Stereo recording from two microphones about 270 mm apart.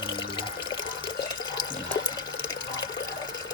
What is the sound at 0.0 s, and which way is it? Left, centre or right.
Water, centre.